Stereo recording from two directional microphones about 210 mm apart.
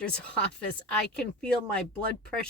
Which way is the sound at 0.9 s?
5° left (ahead or behind).